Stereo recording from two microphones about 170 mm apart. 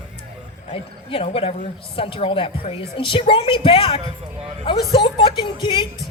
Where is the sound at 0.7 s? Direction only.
35° left (ahead or behind).